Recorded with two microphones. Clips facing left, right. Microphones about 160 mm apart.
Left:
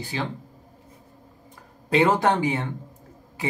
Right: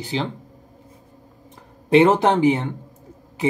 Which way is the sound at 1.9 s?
20° right (ahead or behind).